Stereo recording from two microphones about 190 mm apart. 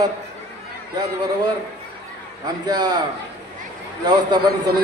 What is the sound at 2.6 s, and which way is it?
Speech, 20° right (ahead or behind).